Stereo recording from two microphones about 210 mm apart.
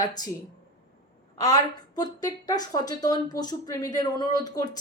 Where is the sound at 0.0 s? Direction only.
20° left (ahead or behind).